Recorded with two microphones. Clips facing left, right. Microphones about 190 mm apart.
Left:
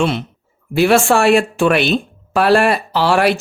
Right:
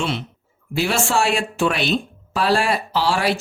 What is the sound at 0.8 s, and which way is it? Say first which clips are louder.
Speech: left 8 dB; 60° left (ahead or behind).